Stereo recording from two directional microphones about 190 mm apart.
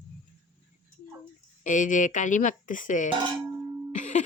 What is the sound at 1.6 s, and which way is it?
Speech, 40° left (ahead or behind).